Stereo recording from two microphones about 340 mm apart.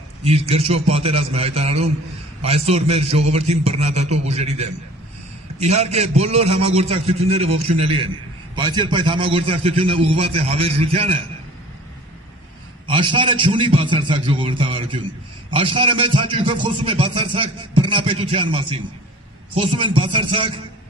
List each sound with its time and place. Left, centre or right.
0.2 s a man's voice: centre
12.8 s speech: centre